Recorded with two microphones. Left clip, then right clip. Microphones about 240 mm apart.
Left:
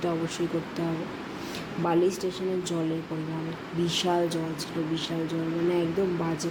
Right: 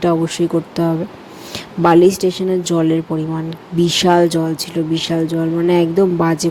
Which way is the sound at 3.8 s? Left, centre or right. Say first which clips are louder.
Right 14 dB; right.